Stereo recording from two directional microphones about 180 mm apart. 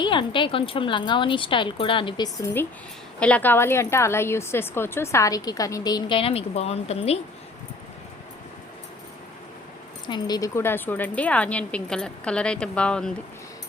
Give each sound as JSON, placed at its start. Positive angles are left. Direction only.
{"t": 0.0, "sound": "a woman's voice", "side_deg": 25}
{"t": 10.1, "sound": "a woman's voice", "side_deg": 20}